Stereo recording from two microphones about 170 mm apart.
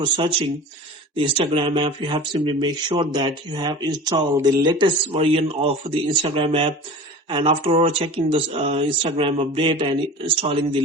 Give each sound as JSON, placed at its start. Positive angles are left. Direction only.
{"t": 0.0, "sound": "speech", "side_deg": -30}